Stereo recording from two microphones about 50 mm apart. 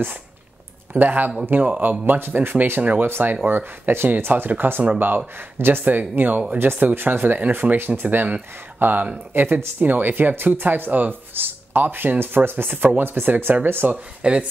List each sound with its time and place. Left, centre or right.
0.9 s speech: right
2.8 s speech: right
3.1 s speech: right
14.2 s speech: right